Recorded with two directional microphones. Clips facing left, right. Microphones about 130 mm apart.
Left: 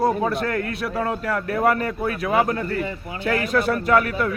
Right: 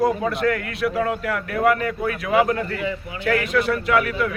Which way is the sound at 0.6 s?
30° left (ahead or behind).